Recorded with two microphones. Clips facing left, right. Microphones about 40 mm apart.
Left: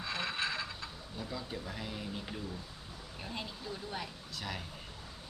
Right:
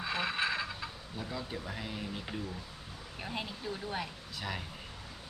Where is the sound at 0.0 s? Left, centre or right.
Centre.